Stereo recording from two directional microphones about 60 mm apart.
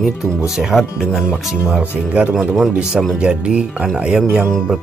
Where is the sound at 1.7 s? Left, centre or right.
Right.